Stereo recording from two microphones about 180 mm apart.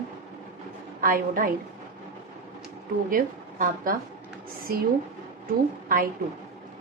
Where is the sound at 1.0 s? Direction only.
50° right (ahead or behind).